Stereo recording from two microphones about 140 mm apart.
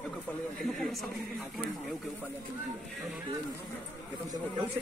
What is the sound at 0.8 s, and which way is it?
Speech, centre (ahead or behind).